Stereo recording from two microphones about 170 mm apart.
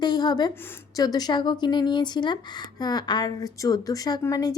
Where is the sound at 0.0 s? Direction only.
25° left (ahead or behind).